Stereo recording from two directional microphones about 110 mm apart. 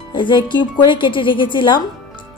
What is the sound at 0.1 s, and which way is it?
A woman's voice, 45° left (ahead or behind).